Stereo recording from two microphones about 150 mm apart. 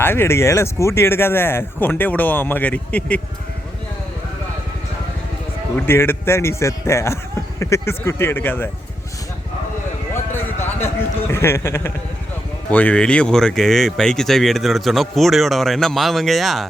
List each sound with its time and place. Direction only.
0.0 s speech: 15° left (ahead or behind)
5.7 s speech: 15° left (ahead or behind)
10.3 s a sound: 15° left (ahead or behind)
12.7 s speech: 10° left (ahead or behind)